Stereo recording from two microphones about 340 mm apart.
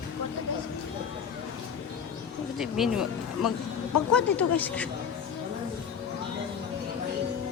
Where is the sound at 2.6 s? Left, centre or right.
Centre.